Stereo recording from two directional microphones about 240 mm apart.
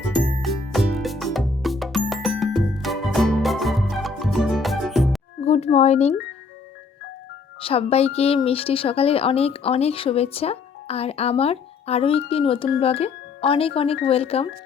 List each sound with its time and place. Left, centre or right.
0.1 s music: centre
5.4 s a sound: left
7.6 s speech: left